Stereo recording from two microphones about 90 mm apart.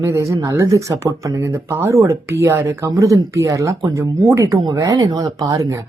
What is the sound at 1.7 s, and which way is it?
Speech, 25° right (ahead or behind).